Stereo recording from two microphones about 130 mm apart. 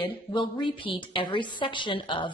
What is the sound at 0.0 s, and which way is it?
A woman's voice, 35° left (ahead or behind).